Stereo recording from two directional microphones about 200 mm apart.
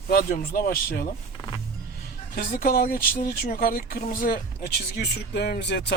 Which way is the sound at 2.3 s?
45° left (ahead or behind).